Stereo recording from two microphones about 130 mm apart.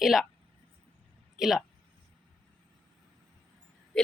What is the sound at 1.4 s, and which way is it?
Speech, centre (ahead or behind).